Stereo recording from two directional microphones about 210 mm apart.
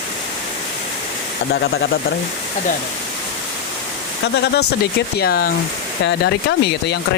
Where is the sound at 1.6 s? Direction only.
50° left (ahead or behind).